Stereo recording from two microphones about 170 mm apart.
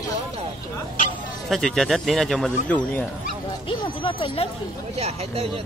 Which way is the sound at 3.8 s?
30° left (ahead or behind).